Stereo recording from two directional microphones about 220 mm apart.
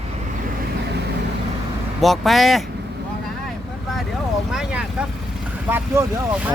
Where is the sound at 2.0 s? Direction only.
Centre (ahead or behind).